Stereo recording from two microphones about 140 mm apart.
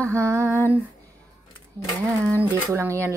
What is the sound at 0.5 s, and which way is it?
Speech, 15° right (ahead or behind).